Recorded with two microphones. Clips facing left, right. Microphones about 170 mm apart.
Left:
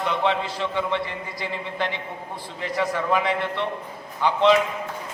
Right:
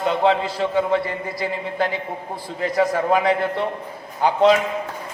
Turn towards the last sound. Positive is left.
turn(degrees=-45)  # may be behind; listen again after turning